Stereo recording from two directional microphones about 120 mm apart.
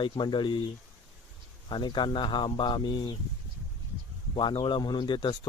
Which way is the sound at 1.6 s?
40° left (ahead or behind).